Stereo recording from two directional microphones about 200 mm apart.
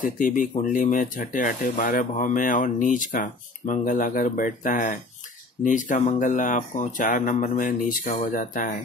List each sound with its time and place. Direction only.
0.2 s speech: 40° left (ahead or behind)